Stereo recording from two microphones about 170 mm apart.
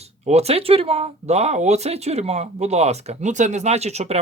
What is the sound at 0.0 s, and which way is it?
Speech, 40° right (ahead or behind).